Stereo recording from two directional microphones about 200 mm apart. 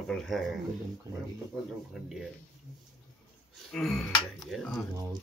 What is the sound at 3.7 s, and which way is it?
A woman's voice, 5° left (ahead or behind).